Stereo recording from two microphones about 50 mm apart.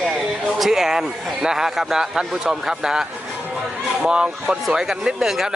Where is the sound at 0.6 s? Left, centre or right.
Centre.